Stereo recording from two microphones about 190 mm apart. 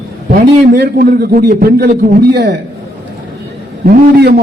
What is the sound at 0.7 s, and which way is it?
A man's voice, 50° right (ahead or behind).